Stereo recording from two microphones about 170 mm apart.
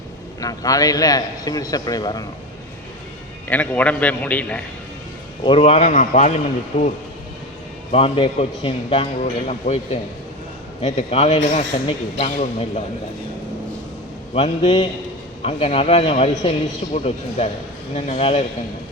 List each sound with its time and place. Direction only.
0.3 s a man's voice: 20° left (ahead or behind)
3.5 s a man's voice: 10° left (ahead or behind)
5.5 s a man's voice: 35° left (ahead or behind)
6.7 s a man's voice: 35° left (ahead or behind)
7.9 s a man's voice: 35° left (ahead or behind)
9.2 s speech: 45° left (ahead or behind)
10.8 s a man's voice: 35° left (ahead or behind)
14.3 s a man's voice: 35° left (ahead or behind)
16.3 s a man's voice: 25° left (ahead or behind)
16.9 s a man's voice: 40° left (ahead or behind)